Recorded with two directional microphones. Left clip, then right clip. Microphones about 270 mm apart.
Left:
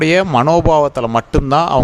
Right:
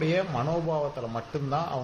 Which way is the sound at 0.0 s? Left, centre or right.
Left.